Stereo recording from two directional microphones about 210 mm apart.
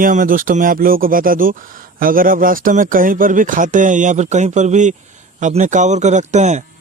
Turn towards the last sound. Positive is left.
turn(degrees=-35)  # may be behind; listen again after turning